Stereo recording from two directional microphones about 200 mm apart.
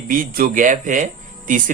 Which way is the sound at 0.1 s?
45° right (ahead or behind).